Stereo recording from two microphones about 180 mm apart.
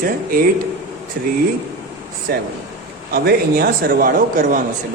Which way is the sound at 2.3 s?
60° right (ahead or behind).